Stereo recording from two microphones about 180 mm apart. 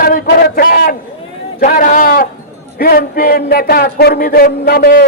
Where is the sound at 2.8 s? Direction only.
55° left (ahead or behind).